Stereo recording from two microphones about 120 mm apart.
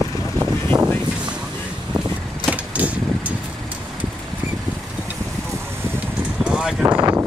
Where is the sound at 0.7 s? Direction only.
35° right (ahead or behind).